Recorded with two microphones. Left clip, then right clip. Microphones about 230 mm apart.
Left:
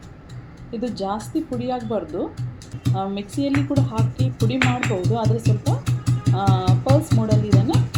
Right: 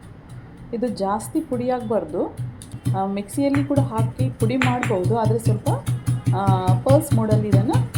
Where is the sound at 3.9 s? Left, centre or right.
Centre.